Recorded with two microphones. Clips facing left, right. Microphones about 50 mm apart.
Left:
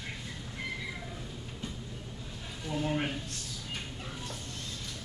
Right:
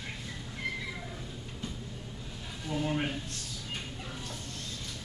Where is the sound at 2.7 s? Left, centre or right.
Centre.